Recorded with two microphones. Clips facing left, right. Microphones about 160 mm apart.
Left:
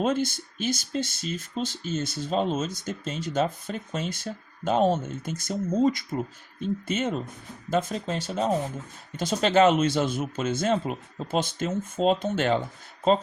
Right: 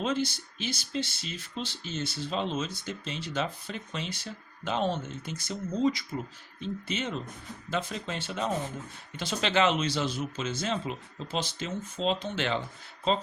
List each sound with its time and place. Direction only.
0.0 s speech: 50° left (ahead or behind)